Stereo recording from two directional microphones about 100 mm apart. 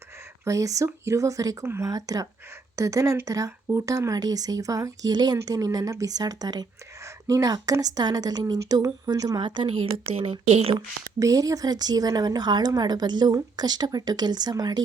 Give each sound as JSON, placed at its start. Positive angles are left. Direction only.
{"t": 0.4, "sound": "speech", "side_deg": -35}
{"t": 8.5, "sound": "a woman's voice", "side_deg": -30}
{"t": 10.4, "sound": "speech", "side_deg": -90}
{"t": 10.8, "sound": "speech", "side_deg": -35}